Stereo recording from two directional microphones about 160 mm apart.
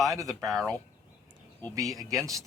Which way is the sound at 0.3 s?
Centre (ahead or behind).